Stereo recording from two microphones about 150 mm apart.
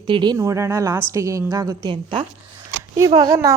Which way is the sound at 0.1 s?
30° right (ahead or behind).